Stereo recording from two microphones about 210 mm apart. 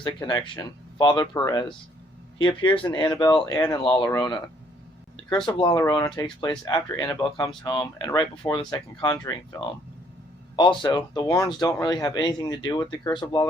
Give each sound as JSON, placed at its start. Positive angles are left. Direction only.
{"t": 0.0, "sound": "speech", "side_deg": 20}
{"t": 5.6, "sound": "speech", "side_deg": 15}